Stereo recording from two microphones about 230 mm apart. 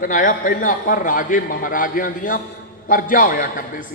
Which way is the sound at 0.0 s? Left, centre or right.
Left.